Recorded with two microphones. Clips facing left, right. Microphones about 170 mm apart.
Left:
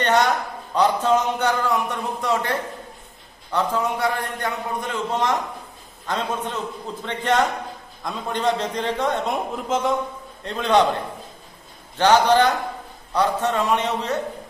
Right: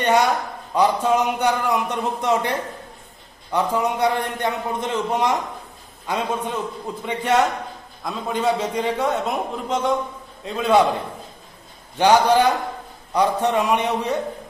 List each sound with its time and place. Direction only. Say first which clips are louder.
0.0 s a man's voice: right 1 dB; 10° right (ahead or behind)
3.5 s a man's voice: right 2 dB; 15° right (ahead or behind)
12.0 s speech: right 1 dB; 10° right (ahead or behind)